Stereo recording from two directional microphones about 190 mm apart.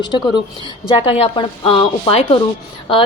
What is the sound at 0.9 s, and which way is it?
A woman's voice, 30° left (ahead or behind).